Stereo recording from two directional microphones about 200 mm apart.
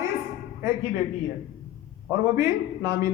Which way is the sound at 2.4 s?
15° right (ahead or behind).